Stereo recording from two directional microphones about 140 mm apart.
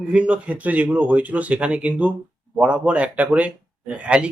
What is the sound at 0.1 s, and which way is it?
Speech, 10° right (ahead or behind).